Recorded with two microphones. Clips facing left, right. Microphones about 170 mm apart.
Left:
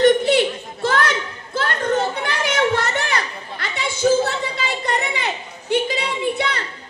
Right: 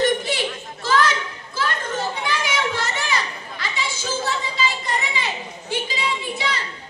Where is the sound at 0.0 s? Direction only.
60° left (ahead or behind).